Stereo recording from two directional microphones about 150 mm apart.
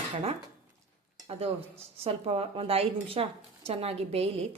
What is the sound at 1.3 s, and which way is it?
A woman's voice, 40° right (ahead or behind).